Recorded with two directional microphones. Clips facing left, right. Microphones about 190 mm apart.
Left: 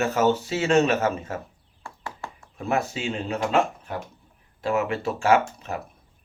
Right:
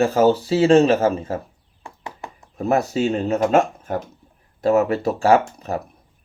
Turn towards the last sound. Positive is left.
turn(degrees=-35)  # may be behind; listen again after turning